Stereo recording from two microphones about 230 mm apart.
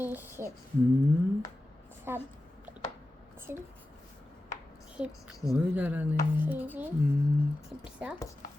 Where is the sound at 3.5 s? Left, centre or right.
Centre.